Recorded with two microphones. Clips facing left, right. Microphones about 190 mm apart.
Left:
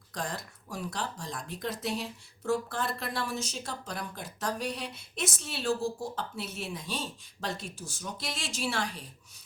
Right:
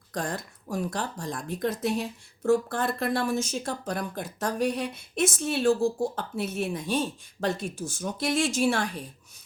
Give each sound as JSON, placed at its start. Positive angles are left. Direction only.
{"t": 0.1, "sound": "speech", "side_deg": -50}